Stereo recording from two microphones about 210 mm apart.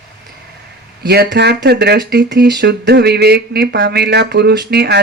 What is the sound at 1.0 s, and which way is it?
Speech, 50° right (ahead or behind).